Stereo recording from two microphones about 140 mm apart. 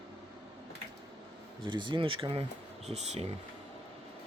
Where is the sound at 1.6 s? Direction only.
35° right (ahead or behind).